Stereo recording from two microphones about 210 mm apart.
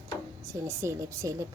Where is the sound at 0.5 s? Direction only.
15° right (ahead or behind).